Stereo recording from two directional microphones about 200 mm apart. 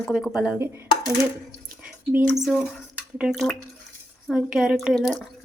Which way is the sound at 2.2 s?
Centre (ahead or behind).